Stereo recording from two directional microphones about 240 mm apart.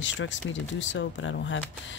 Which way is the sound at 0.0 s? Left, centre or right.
Left.